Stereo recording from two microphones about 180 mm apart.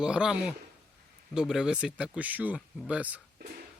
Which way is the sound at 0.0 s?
5° right (ahead or behind).